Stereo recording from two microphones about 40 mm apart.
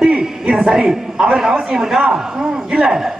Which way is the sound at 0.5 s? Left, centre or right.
Centre.